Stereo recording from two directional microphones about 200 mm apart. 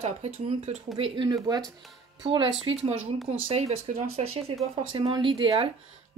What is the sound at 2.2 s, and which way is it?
Speech, 25° right (ahead or behind).